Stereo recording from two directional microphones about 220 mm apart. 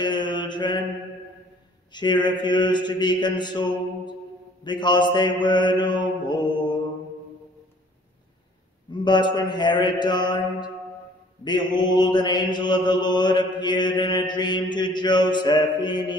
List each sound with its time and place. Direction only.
0.0 s mantra: 20° left (ahead or behind)
2.0 s mantra: 20° left (ahead or behind)
8.9 s mantra: 20° left (ahead or behind)